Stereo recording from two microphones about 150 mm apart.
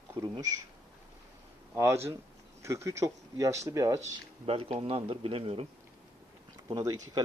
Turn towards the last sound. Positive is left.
turn(degrees=-25)  # may be behind; listen again after turning